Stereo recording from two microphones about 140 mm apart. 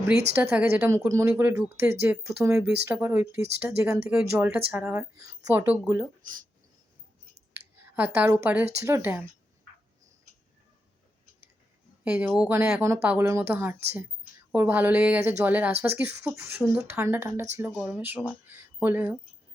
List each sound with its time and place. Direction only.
0.5 s speech: 15° right (ahead or behind)
7.9 s speech: 10° right (ahead or behind)
12.0 s speech: 5° right (ahead or behind)
12.8 s speech: 20° right (ahead or behind)